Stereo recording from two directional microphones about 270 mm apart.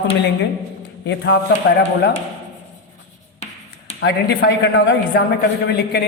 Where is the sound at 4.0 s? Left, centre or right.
Left.